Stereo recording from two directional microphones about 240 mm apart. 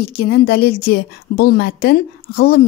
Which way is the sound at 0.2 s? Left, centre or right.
Left.